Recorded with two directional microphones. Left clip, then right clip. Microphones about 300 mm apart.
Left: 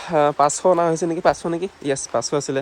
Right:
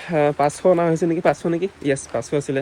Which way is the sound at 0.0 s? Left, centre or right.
Centre.